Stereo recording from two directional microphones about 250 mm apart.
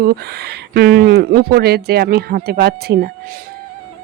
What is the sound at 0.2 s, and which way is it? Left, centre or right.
Speech, right.